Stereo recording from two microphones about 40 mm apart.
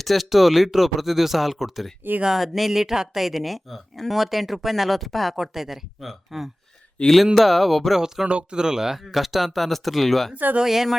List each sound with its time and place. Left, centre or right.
0.0 s speech: centre
7.0 s speech: left
7.3 s speech: centre
8.3 s speech: right
9.0 s speech: centre
10.3 s speech: right
10.6 s speech: centre